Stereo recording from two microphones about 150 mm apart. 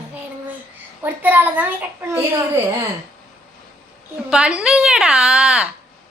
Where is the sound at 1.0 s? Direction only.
10° right (ahead or behind).